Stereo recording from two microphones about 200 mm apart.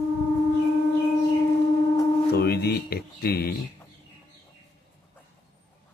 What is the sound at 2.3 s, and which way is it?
Speech, 55° left (ahead or behind).